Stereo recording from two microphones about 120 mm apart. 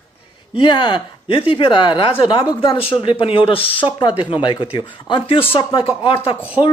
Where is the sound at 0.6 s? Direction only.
40° left (ahead or behind).